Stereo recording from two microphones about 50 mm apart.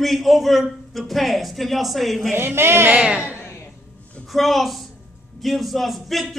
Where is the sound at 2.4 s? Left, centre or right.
Right.